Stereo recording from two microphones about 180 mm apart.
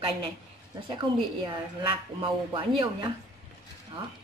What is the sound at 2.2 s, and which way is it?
Speech, 25° right (ahead or behind).